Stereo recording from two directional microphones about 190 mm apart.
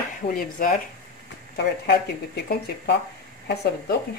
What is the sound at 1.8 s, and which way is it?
Speech, 60° left (ahead or behind).